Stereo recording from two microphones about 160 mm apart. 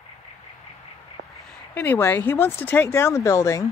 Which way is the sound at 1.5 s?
10° left (ahead or behind).